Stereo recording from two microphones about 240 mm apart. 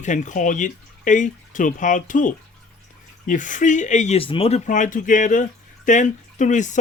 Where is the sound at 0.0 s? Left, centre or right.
Left.